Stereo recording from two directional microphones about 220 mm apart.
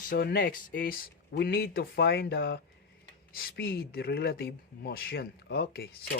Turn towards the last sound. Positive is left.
turn(degrees=45)  # may be behind; listen again after turning